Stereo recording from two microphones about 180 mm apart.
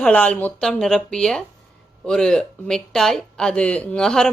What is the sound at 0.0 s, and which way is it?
Speech, 5° left (ahead or behind).